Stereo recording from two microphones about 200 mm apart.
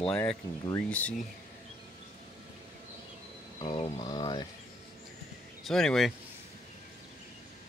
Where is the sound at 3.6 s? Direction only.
25° left (ahead or behind).